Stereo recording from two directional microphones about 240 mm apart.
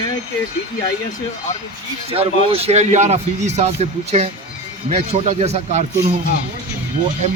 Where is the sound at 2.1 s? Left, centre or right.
Right.